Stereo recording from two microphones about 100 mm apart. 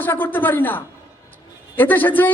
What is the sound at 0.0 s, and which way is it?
A man's voice, 20° left (ahead or behind).